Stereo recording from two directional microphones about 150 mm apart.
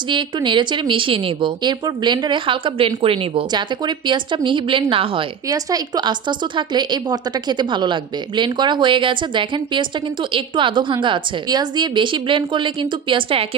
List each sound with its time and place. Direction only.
0.1 s a woman's voice: 30° right (ahead or behind)